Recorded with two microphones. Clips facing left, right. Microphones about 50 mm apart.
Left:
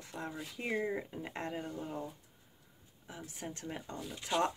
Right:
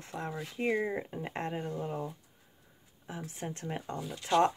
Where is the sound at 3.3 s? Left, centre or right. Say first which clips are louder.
Right 4 dB; right.